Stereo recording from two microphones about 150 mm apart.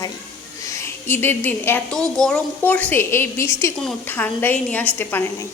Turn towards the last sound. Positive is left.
turn(degrees=15)  # may be behind; listen again after turning